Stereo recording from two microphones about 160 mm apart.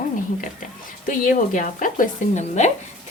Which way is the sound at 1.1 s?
60° left (ahead or behind).